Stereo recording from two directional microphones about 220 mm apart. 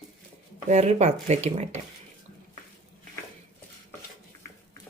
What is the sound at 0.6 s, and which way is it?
Speech, 30° right (ahead or behind).